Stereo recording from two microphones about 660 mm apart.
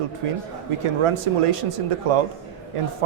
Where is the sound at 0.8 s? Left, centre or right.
Right.